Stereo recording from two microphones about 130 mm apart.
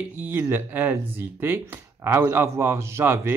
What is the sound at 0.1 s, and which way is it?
Speech, 15° right (ahead or behind).